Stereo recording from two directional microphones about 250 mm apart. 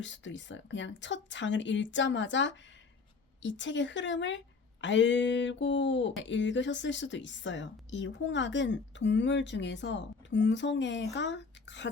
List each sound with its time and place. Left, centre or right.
0.0 s a woman's voice: left